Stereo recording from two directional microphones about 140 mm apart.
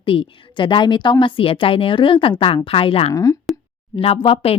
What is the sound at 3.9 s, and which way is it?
Speech, 40° left (ahead or behind).